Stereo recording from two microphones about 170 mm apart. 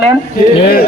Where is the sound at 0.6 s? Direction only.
65° left (ahead or behind).